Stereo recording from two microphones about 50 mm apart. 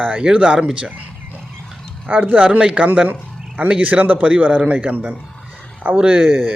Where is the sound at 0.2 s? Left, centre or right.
Right.